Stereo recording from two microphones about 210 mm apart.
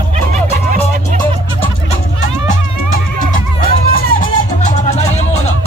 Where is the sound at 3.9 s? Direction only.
40° left (ahead or behind).